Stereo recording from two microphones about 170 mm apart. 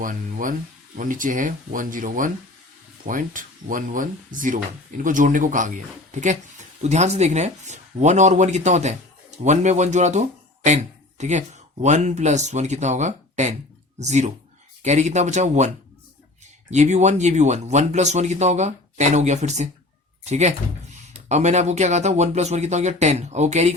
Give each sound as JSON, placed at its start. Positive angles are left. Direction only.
{"t": 0.0, "sound": "speech", "side_deg": -50}
{"t": 16.7, "sound": "speech", "side_deg": -45}